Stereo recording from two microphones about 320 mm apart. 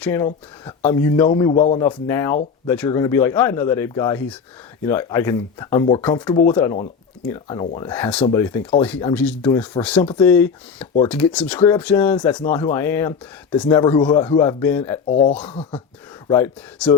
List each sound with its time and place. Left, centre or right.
0.0 s speech: centre
1.8 s speech: centre
15.0 s speech: left
15.3 s speech: centre